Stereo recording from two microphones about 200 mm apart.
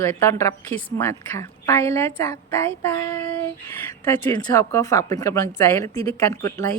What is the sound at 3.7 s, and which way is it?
A woman's voice, 10° left (ahead or behind).